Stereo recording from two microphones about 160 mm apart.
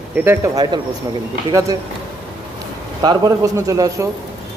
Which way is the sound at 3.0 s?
20° right (ahead or behind).